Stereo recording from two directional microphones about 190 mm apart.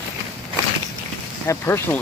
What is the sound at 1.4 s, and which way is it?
Speech, 15° left (ahead or behind).